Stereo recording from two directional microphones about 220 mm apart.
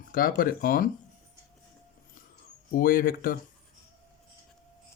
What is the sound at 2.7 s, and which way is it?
Speech, 40° left (ahead or behind).